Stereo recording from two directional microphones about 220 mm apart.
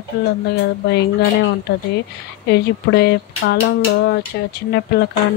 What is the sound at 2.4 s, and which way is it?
Speech, 45° left (ahead or behind).